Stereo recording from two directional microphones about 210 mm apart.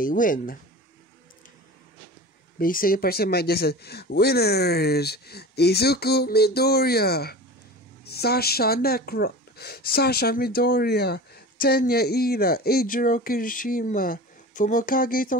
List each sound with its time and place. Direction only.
0.0 s speech: 40° left (ahead or behind)
2.6 s speech: 40° left (ahead or behind)